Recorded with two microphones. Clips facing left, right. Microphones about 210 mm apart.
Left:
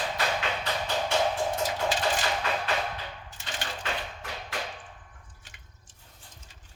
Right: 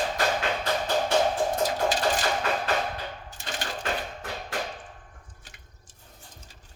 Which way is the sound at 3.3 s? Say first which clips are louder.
Right 2 dB; 40° right (ahead or behind).